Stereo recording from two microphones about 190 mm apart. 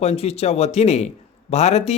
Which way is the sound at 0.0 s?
35° left (ahead or behind).